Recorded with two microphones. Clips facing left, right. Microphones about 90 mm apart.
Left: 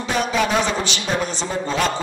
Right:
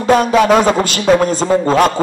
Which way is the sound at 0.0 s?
50° right (ahead or behind).